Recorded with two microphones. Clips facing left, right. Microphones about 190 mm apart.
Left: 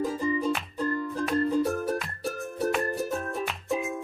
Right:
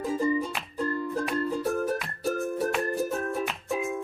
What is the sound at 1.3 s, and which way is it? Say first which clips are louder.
Music: left 5 dB; centre (ahead or behind).